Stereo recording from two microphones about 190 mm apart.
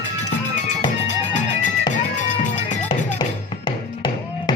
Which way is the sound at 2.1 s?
40° left (ahead or behind).